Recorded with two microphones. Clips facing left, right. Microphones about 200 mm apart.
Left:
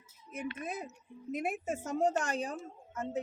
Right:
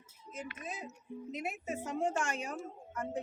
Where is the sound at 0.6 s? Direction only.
55° left (ahead or behind); by 2.6 s 35° left (ahead or behind).